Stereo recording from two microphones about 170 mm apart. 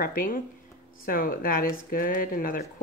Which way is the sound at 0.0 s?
55° left (ahead or behind).